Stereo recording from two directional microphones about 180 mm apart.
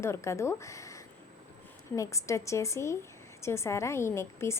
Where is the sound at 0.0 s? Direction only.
15° left (ahead or behind).